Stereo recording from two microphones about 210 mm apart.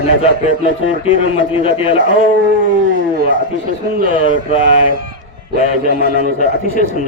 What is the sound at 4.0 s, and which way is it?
Speech, 40° right (ahead or behind).